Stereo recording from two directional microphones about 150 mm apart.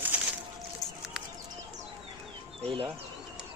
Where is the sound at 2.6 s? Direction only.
40° right (ahead or behind).